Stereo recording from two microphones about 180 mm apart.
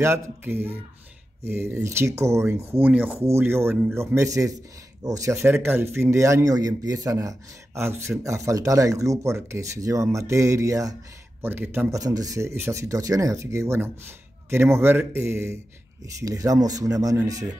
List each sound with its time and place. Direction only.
0.0 s speech: 15° right (ahead or behind)